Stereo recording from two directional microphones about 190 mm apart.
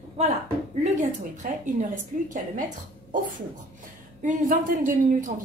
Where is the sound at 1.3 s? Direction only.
40° right (ahead or behind).